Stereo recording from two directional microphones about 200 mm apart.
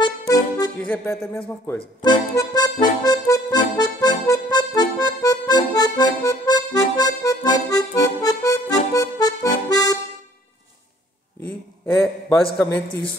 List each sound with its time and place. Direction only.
0.0 s accordion: 20° left (ahead or behind)
0.7 s music: 5° left (ahead or behind)
1.8 s accordion: 20° left (ahead or behind)
8.9 s music: 15° left (ahead or behind)
11.4 s a sound: 5° left (ahead or behind)
12.5 s music: 5° left (ahead or behind)